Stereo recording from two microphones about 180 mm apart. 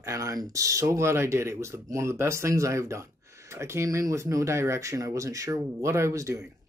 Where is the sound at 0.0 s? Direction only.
15° right (ahead or behind).